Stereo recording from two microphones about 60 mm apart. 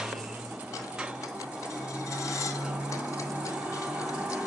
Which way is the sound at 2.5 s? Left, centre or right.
Centre.